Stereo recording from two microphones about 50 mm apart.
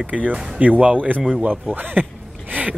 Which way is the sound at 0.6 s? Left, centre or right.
Right.